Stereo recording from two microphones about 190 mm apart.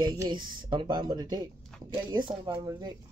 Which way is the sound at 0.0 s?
25° right (ahead or behind).